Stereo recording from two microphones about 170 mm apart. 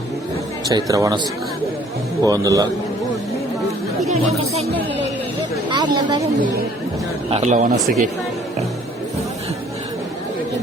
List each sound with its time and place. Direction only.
0.7 s speech: 20° right (ahead or behind)
5.7 s speech: 25° right (ahead or behind)
7.3 s a man's voice: 40° right (ahead or behind)
7.8 s speech: centre (ahead or behind)